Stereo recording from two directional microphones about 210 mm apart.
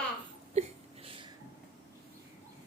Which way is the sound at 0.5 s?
30° right (ahead or behind).